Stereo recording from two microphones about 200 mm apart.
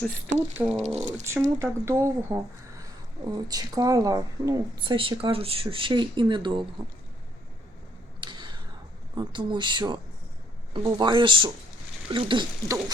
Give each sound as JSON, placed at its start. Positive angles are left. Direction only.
{"t": 0.3, "sound": "speech", "side_deg": -10}
{"t": 0.9, "sound": "speech", "side_deg": -35}
{"t": 1.2, "sound": "speech", "side_deg": -15}
{"t": 8.2, "sound": "a sound", "side_deg": -25}
{"t": 9.1, "sound": "speech", "side_deg": -25}